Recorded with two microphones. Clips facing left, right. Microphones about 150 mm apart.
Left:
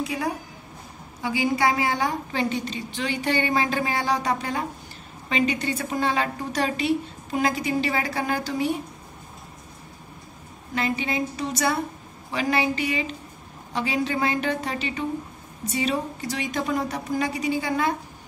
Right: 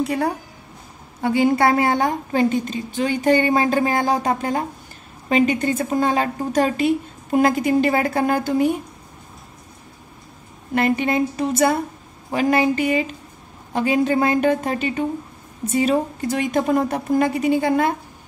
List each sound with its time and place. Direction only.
0.0 s a woman's voice: 65° right (ahead or behind)
10.7 s a woman's voice: 55° right (ahead or behind)